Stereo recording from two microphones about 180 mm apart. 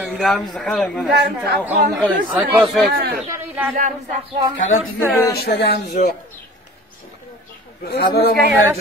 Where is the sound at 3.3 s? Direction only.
10° right (ahead or behind).